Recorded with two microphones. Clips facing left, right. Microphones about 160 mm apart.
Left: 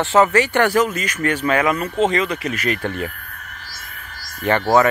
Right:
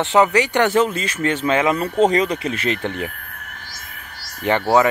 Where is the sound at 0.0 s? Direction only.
15° right (ahead or behind).